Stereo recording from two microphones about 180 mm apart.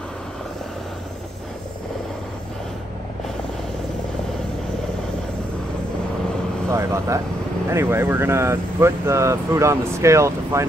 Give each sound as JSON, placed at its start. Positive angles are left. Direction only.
{"t": 6.7, "sound": "vehicle", "side_deg": -15}
{"t": 7.7, "sound": "speech", "side_deg": -15}